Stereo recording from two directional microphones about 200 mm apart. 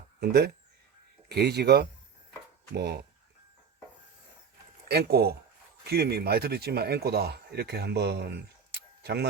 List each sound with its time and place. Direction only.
0.2 s speech: 55° right (ahead or behind)
4.9 s speech: 50° right (ahead or behind)